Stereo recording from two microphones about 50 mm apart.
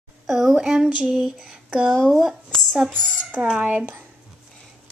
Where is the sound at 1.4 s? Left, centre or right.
Right.